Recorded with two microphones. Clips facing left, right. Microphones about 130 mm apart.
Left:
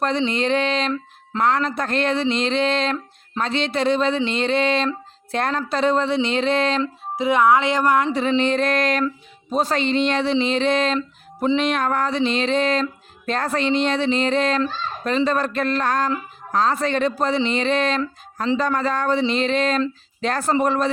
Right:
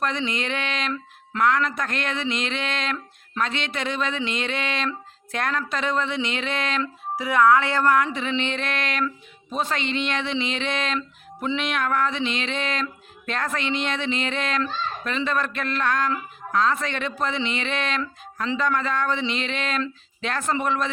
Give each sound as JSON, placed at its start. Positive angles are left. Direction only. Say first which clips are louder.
{"t": 0.0, "sound": "speech", "louder": "left 6 dB", "side_deg": 30}
{"t": 8.1, "sound": "speech", "louder": "left 7 dB", "side_deg": 35}